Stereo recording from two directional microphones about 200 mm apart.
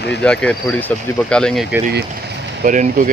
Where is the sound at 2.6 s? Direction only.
40° right (ahead or behind).